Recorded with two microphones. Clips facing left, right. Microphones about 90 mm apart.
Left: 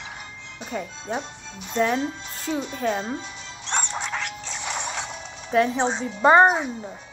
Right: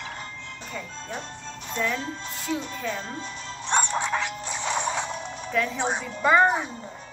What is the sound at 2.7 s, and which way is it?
Speech, 50° left (ahead or behind).